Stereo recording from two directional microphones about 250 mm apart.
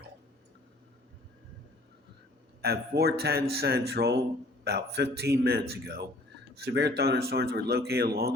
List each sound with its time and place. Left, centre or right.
2.6 s speech: right